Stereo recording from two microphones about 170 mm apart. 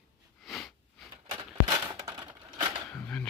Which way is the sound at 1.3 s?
35° right (ahead or behind).